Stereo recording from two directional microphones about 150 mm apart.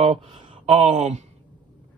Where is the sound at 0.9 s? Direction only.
50° right (ahead or behind).